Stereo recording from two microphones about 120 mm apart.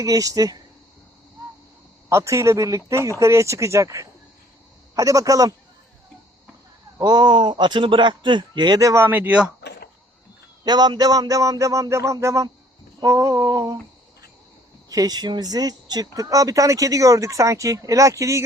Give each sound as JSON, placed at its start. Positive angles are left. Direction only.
{"t": 0.0, "sound": "speech", "side_deg": -30}
{"t": 2.0, "sound": "speech", "side_deg": -25}
{"t": 7.0, "sound": "speech", "side_deg": -35}
{"t": 10.6, "sound": "speech", "side_deg": -35}
{"t": 14.8, "sound": "speech", "side_deg": -30}